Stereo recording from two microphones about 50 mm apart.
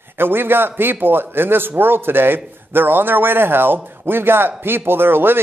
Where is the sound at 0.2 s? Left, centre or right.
Right.